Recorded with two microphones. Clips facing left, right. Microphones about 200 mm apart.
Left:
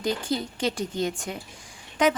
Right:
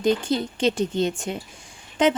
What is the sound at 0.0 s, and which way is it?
Speech, 20° right (ahead or behind).